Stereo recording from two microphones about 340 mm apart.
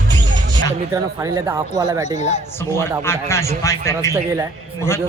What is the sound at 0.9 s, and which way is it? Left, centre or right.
Speech, centre.